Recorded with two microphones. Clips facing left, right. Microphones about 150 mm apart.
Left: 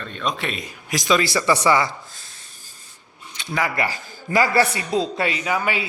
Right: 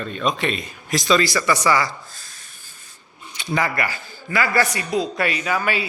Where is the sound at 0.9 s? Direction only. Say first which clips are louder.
Right 1 dB; 15° left (ahead or behind).